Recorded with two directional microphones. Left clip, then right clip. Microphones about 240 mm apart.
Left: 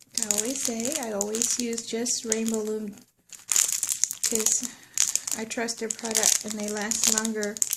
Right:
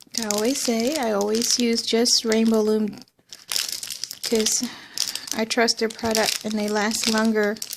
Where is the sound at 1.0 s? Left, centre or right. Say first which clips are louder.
Right 7 dB; right.